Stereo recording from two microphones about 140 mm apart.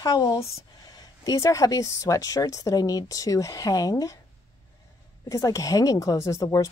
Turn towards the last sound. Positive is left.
turn(degrees=25)  # may be behind; listen again after turning